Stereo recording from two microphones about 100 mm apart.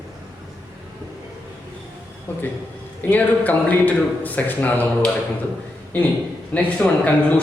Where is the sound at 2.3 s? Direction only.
20° left (ahead or behind).